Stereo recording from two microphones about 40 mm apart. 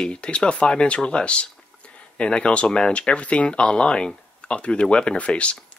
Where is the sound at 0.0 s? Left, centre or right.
Left.